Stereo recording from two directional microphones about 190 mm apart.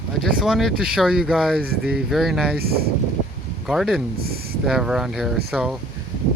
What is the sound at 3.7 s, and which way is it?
Speech, centre (ahead or behind).